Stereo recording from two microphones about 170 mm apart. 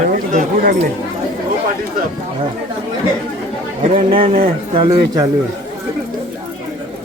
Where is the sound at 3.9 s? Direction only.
30° right (ahead or behind).